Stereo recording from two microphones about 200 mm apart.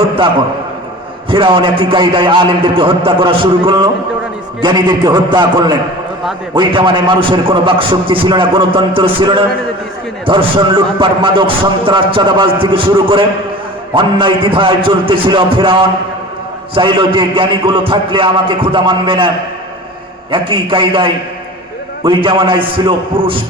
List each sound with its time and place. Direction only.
1.3 s a man's voice: 25° right (ahead or behind)
20.3 s a man's voice: 25° right (ahead or behind)